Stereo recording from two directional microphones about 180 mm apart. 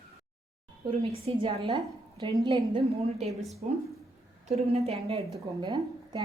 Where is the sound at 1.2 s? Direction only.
30° right (ahead or behind).